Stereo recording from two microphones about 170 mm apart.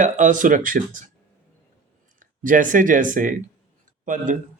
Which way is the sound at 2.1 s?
50° right (ahead or behind).